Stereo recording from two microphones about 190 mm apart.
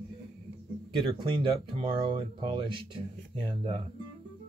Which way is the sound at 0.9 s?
25° right (ahead or behind).